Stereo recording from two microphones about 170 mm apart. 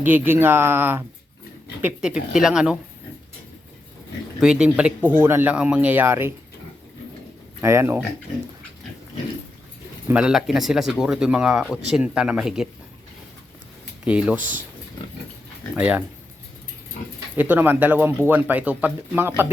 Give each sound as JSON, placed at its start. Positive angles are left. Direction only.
{"t": 0.0, "sound": "speech", "side_deg": -10}
{"t": 4.4, "sound": "speech", "side_deg": -5}
{"t": 7.6, "sound": "speech", "side_deg": -15}
{"t": 10.1, "sound": "speech", "side_deg": -5}
{"t": 14.0, "sound": "speech", "side_deg": -5}
{"t": 15.7, "sound": "speech", "side_deg": -5}
{"t": 17.3, "sound": "speech", "side_deg": -10}